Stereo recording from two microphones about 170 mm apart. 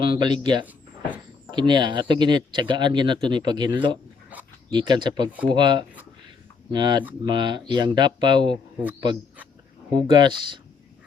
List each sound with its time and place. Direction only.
0.0 s speech: 30° right (ahead or behind)
9.9 s speech: 25° right (ahead or behind)